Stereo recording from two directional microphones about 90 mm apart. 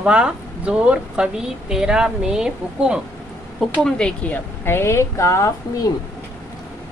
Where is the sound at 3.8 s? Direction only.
10° left (ahead or behind); by 5.9 s 35° left (ahead or behind).